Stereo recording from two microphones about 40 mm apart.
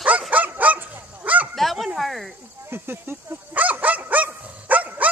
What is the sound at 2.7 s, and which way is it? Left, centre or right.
Speech, right.